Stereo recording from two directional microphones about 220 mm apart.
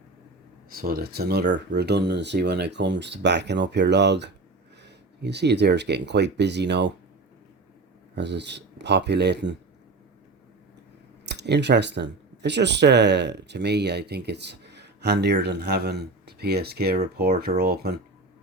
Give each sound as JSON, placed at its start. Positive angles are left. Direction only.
{"t": 0.8, "sound": "speech", "side_deg": -45}
{"t": 8.1, "sound": "speech", "side_deg": -50}
{"t": 11.3, "sound": "speech", "side_deg": -50}